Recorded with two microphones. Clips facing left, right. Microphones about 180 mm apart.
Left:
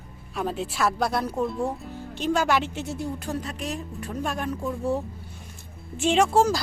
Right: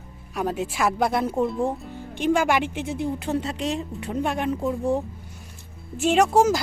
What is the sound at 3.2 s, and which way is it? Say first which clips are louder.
Speech: right 5 dB; 25° right (ahead or behind).